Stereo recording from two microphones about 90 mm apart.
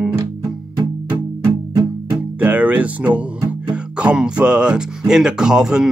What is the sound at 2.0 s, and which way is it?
Music, 20° right (ahead or behind).